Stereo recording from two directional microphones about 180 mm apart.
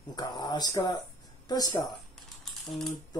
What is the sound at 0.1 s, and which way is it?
Speech, 25° left (ahead or behind).